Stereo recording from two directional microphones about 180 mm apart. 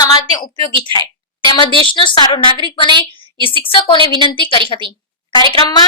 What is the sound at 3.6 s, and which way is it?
Speech, 30° left (ahead or behind).